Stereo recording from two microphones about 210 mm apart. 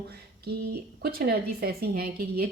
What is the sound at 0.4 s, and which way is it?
Speech, 45° right (ahead or behind).